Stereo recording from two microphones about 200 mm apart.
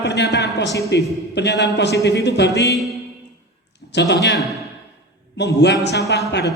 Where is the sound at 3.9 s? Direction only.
60° left (ahead or behind).